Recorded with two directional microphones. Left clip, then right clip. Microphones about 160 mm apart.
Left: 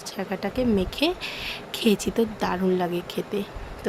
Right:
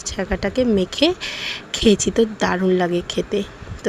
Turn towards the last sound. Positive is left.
turn(degrees=-20)  # may be behind; listen again after turning